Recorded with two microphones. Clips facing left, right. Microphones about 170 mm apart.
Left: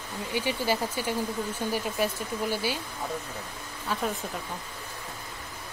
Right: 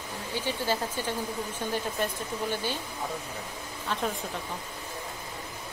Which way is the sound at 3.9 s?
5° left (ahead or behind).